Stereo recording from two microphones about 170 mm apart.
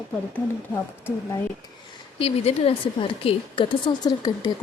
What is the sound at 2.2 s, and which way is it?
A woman's voice, 35° left (ahead or behind).